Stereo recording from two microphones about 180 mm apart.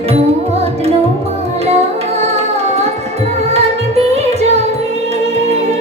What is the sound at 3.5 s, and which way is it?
Music, 35° right (ahead or behind).